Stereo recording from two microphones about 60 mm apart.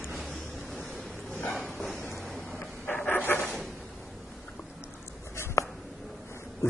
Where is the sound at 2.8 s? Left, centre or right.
Left.